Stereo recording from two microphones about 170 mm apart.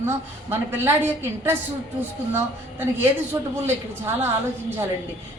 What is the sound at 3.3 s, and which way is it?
Speech, 20° right (ahead or behind).